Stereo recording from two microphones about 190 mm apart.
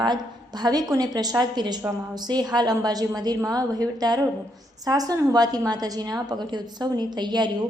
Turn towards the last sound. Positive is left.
turn(degrees=-20)  # may be behind; listen again after turning